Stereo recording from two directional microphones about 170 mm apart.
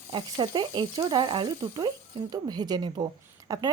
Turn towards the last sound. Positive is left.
turn(degrees=-20)  # may be behind; listen again after turning